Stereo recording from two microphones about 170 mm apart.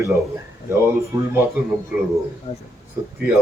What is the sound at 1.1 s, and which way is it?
Speech, 15° right (ahead or behind).